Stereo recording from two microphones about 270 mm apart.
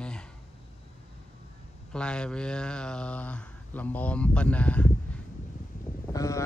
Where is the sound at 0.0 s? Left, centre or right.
Centre.